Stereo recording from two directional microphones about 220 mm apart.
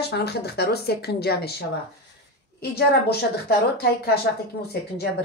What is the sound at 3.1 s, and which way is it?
A woman's voice, 45° left (ahead or behind).